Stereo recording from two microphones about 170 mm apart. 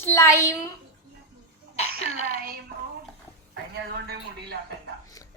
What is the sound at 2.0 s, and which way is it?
Speech, 40° left (ahead or behind).